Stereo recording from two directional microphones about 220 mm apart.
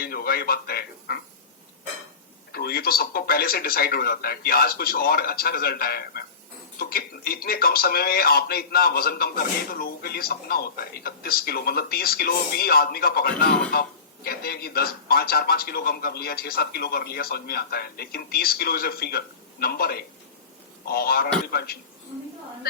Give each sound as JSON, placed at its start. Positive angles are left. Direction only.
{"t": 0.0, "sound": "speech", "side_deg": 45}
{"t": 2.5, "sound": "speech", "side_deg": 45}